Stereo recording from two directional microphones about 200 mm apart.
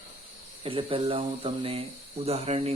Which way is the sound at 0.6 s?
25° right (ahead or behind).